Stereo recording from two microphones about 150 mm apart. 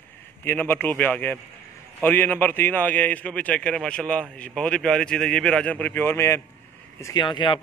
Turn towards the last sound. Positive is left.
turn(degrees=30)  # may be behind; listen again after turning